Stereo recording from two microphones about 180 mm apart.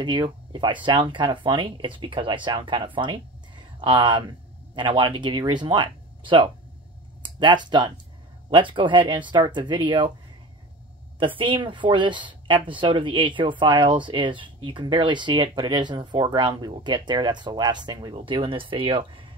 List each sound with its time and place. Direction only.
0.0 s speech: 25° right (ahead or behind)
11.1 s speech: 30° right (ahead or behind)